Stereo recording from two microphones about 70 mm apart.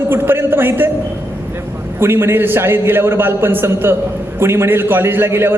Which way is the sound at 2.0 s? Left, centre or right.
Right.